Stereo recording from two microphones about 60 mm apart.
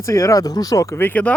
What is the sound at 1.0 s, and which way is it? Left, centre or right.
Speech, left.